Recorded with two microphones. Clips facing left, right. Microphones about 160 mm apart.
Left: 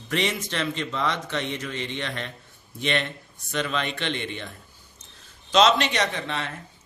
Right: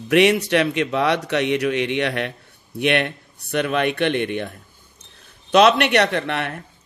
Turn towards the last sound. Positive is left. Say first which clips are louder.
# right 7 dB
turn(degrees=-65)  # may be behind; listen again after turning